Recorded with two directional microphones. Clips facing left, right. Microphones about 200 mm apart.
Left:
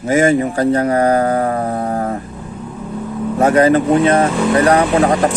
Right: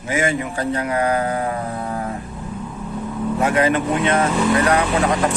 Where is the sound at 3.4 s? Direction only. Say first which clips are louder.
Left 7 dB; 40° left (ahead or behind).